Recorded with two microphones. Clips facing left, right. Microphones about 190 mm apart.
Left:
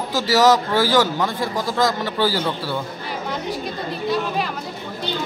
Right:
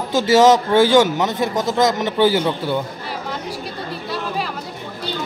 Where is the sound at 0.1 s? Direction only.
25° right (ahead or behind).